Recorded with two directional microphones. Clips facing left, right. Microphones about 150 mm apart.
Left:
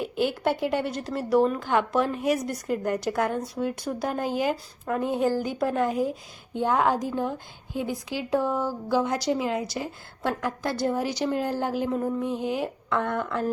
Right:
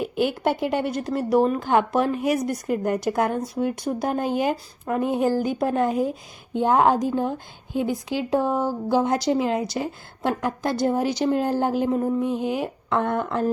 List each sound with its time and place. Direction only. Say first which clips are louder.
0.0 s speech: right 3 dB; 15° right (ahead or behind)